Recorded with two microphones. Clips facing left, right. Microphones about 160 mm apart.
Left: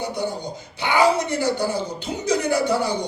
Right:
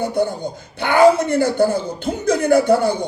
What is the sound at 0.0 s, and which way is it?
Speech, 50° right (ahead or behind).